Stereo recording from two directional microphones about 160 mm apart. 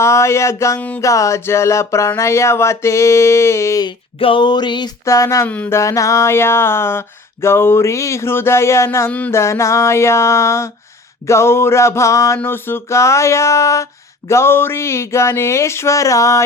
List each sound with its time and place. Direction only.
0.0 s music: 15° left (ahead or behind)
4.2 s speech: 30° left (ahead or behind)
5.5 s music: 10° left (ahead or behind)